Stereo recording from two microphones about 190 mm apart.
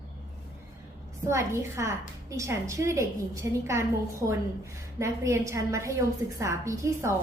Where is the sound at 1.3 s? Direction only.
15° right (ahead or behind).